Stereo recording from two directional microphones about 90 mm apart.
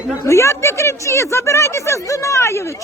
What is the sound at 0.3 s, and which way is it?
Speech, 35° left (ahead or behind).